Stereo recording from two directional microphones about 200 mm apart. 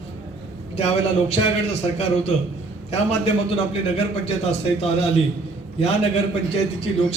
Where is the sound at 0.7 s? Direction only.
30° left (ahead or behind).